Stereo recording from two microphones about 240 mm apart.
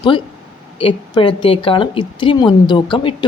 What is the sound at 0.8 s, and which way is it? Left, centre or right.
A woman's voice, left.